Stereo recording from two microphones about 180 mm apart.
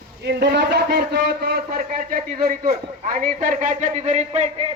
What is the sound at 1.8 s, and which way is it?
A man's voice, 45° right (ahead or behind).